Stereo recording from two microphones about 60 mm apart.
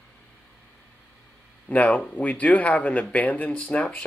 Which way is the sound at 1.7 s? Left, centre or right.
Left.